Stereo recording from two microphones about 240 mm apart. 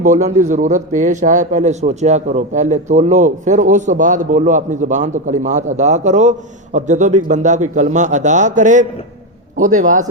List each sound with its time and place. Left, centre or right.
0.0 s a man's voice: right